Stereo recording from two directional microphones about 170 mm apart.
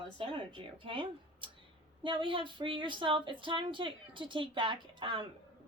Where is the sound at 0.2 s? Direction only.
30° right (ahead or behind).